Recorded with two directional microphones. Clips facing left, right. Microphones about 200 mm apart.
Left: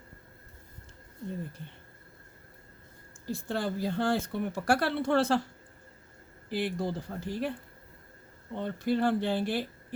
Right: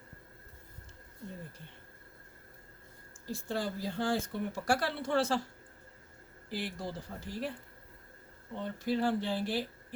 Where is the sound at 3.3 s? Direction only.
60° left (ahead or behind).